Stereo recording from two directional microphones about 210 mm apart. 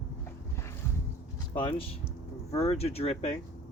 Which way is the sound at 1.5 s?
25° left (ahead or behind).